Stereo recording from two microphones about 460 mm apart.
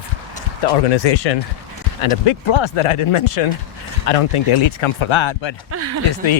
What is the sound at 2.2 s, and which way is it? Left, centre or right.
Speech, left.